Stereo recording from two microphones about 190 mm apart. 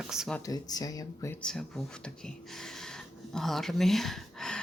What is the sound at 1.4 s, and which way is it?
Speech, 5° left (ahead or behind).